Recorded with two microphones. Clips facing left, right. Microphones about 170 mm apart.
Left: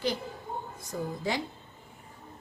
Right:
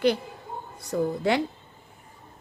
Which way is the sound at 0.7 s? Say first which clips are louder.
Right 13 dB; 70° right (ahead or behind).